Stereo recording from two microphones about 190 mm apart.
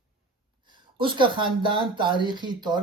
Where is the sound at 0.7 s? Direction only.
25° right (ahead or behind).